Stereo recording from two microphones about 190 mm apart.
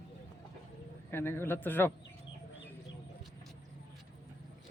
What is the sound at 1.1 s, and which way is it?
Speech, 10° left (ahead or behind).